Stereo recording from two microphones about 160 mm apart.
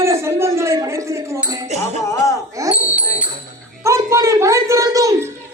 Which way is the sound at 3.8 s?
20° right (ahead or behind).